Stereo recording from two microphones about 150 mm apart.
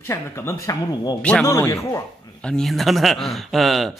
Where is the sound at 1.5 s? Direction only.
20° left (ahead or behind).